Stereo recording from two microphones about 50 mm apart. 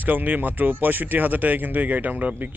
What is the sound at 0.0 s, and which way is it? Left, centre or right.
Speech, right.